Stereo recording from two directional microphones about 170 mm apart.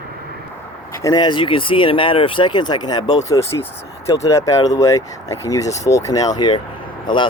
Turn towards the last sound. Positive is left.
turn(degrees=30)  # may be behind; listen again after turning